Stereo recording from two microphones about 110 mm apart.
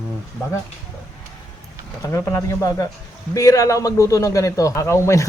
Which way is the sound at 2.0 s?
30° left (ahead or behind).